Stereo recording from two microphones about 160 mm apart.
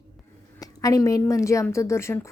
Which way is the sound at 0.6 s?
20° left (ahead or behind).